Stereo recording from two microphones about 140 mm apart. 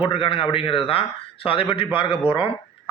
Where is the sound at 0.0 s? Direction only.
40° left (ahead or behind).